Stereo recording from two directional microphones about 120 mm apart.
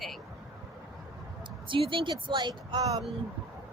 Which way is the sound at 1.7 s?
45° right (ahead or behind).